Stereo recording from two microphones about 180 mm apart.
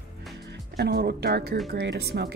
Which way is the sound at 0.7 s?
65° right (ahead or behind).